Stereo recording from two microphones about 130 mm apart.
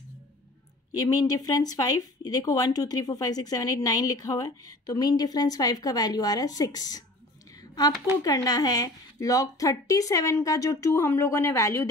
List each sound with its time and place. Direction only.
0.9 s speech: 30° left (ahead or behind)
8.2 s speech: 30° left (ahead or behind)